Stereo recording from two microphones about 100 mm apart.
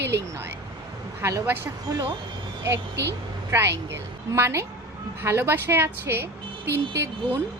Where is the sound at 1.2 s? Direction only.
30° right (ahead or behind).